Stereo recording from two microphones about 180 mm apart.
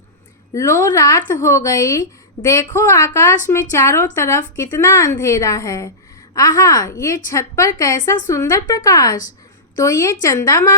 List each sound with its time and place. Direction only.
0.5 s a woman's voice: 15° left (ahead or behind)